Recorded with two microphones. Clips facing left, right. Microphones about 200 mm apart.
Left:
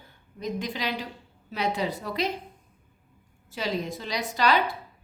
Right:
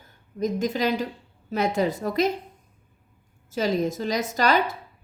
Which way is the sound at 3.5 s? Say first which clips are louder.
Right 6 dB; 45° right (ahead or behind).